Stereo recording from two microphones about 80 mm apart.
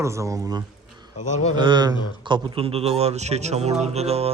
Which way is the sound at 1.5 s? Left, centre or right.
Right.